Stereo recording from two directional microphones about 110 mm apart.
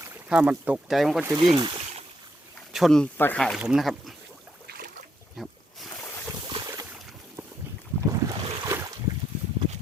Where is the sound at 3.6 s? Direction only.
5° right (ahead or behind).